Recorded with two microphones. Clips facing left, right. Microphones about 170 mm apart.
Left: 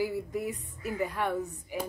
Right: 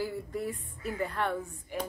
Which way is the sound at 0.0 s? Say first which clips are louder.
Left 3 dB; 10° left (ahead or behind).